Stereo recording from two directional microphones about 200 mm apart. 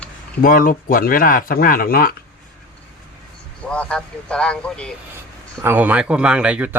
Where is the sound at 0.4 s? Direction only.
45° left (ahead or behind).